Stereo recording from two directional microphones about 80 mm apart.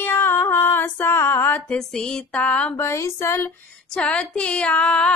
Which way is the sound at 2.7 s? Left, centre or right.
Left.